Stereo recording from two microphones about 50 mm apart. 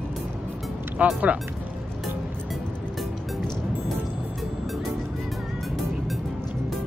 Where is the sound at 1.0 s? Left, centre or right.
Right.